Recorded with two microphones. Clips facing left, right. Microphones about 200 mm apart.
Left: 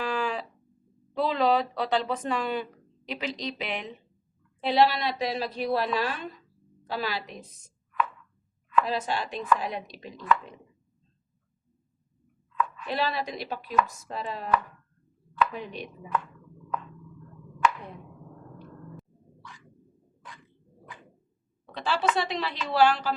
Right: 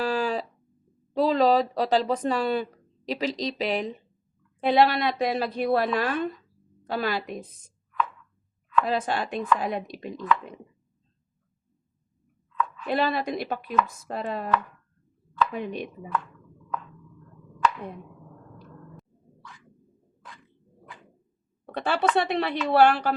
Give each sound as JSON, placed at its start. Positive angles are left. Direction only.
{"t": 0.0, "sound": "a sound", "side_deg": -35}
{"t": 1.1, "sound": "speech", "side_deg": -40}
{"t": 4.6, "sound": "a woman's voice", "side_deg": -50}
{"t": 8.8, "sound": "a woman's voice", "side_deg": -50}
{"t": 12.9, "sound": "a woman's voice", "side_deg": -55}
{"t": 15.5, "sound": "a woman's voice", "side_deg": -55}
{"t": 21.7, "sound": "a woman's voice", "side_deg": -55}